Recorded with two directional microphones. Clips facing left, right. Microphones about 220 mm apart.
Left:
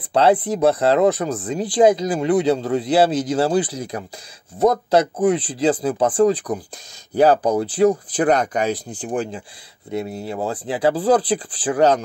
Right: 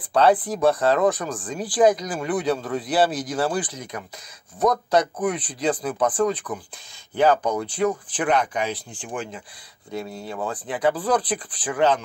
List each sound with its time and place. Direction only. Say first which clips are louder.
0.1 s a man's voice: left 2 dB; 25° left (ahead or behind)
9.8 s a man's voice: left 5 dB; 20° left (ahead or behind); by 12.0 s 40° left (ahead or behind)